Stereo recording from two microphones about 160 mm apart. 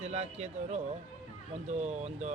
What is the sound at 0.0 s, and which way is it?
Speech, 45° right (ahead or behind).